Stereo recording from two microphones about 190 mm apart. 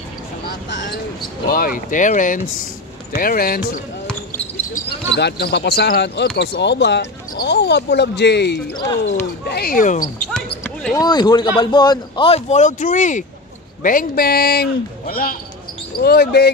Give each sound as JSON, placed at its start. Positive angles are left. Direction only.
{"t": 1.5, "sound": "a man's voice", "side_deg": 50}
{"t": 9.5, "sound": "a man's voice", "side_deg": 50}
{"t": 10.3, "sound": "basketball bounce", "side_deg": 5}
{"t": 11.0, "sound": "a man's voice", "side_deg": 25}